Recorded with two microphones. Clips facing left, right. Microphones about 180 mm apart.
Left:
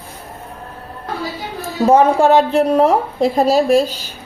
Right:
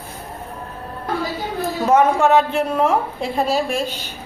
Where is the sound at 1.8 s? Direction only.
30° left (ahead or behind).